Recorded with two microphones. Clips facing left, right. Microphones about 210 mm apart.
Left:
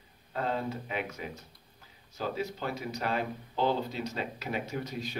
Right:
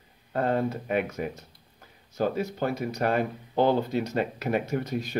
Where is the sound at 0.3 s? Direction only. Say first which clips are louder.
Right 7 dB; 55° right (ahead or behind).